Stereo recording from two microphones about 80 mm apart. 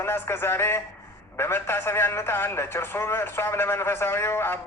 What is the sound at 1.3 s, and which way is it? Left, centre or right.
A man's voice, left.